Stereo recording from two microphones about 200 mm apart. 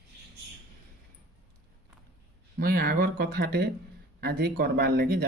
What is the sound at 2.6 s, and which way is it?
Speech, 50° right (ahead or behind).